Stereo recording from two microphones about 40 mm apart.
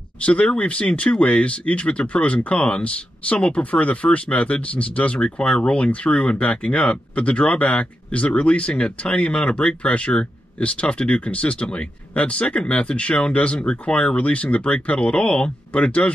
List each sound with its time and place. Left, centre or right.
0.2 s speech: left